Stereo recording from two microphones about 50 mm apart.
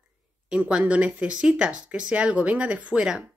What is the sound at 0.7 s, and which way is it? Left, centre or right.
Speech, right.